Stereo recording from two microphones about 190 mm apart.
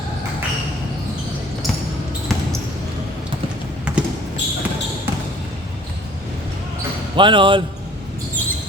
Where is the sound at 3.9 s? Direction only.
5° right (ahead or behind).